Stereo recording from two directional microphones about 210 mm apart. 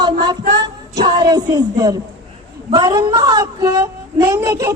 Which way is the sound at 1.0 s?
20° right (ahead or behind).